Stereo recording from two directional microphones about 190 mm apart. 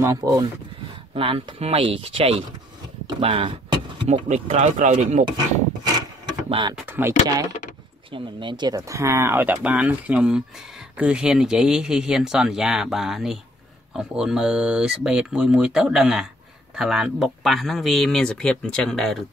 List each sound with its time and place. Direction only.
0.0 s speech: 20° right (ahead or behind)
1.1 s speech: 30° right (ahead or behind)
5.9 s vehicle: 25° right (ahead or behind)
6.7 s speech: 10° right (ahead or behind)
8.1 s speech: 25° right (ahead or behind); by 19.2 s centre (ahead or behind)